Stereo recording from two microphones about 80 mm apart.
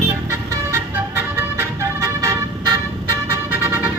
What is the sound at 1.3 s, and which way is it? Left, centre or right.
Music, right.